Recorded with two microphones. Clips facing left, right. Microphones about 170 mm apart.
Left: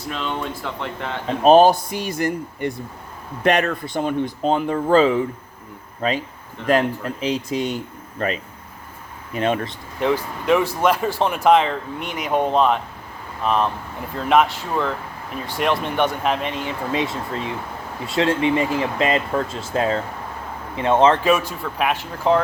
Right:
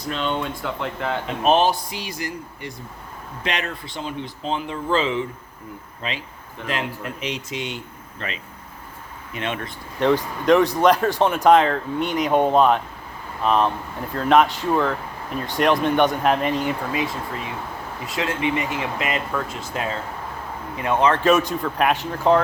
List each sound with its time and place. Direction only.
0.6 s speech: centre (ahead or behind)
1.3 s speech: 40° left (ahead or behind)
1.9 s speech: 50° left (ahead or behind)
10.0 s speech: 5° left (ahead or behind)
16.9 s speech: 25° left (ahead or behind)
21.2 s speech: 5° left (ahead or behind)